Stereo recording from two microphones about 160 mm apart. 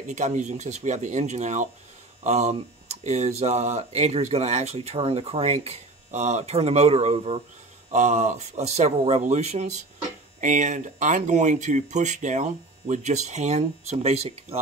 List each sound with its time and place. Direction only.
0.1 s speech: 50° right (ahead or behind)